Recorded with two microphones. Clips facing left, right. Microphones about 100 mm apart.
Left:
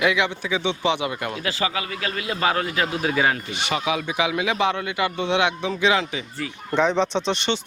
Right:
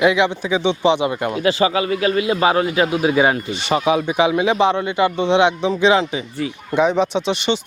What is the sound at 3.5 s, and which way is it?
Speech, 35° right (ahead or behind).